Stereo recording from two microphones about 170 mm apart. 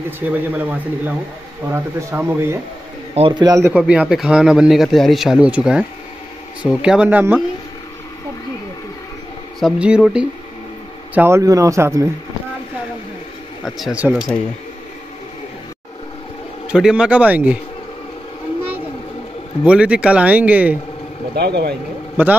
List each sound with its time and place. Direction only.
0.2 s speech: 10° right (ahead or behind)
3.2 s a man's voice: 30° right (ahead or behind)
3.8 s a man's voice: 5° right (ahead or behind)
9.6 s a man's voice: 5° right (ahead or behind)
13.7 s a man's voice: centre (ahead or behind)
16.6 s speech: 5° right (ahead or behind)
19.6 s speech: 5° right (ahead or behind)
21.4 s speech: 75° right (ahead or behind)
22.1 s a man's voice: 10° right (ahead or behind)